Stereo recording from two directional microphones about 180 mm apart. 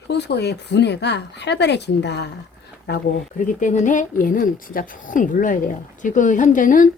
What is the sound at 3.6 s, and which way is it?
A woman's voice, 45° left (ahead or behind).